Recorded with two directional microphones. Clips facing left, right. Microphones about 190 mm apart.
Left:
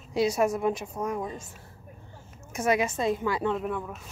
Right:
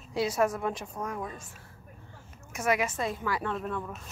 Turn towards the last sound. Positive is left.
turn(degrees=5)  # may be behind; listen again after turning